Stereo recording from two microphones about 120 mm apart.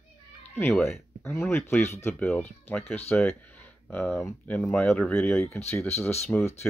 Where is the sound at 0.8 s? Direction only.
20° left (ahead or behind).